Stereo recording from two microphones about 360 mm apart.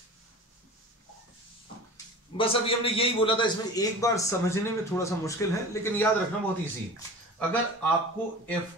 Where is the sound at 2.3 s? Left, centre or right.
Centre.